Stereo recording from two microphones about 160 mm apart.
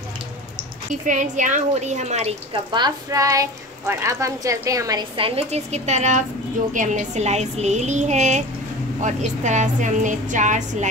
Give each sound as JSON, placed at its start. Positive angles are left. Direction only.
{"t": 1.0, "sound": "a woman's voice", "side_deg": -50}
{"t": 2.7, "sound": "a woman's voice", "side_deg": -25}
{"t": 5.1, "sound": "a woman's voice", "side_deg": -35}